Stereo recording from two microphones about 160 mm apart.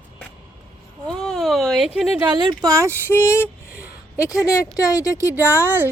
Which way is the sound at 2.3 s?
25° right (ahead or behind).